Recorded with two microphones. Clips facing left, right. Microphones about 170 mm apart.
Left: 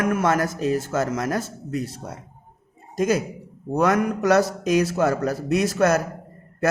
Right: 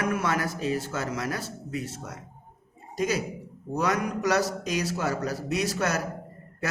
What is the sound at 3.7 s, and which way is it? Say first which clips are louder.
A man's voice: left 7 dB; 50° left (ahead or behind).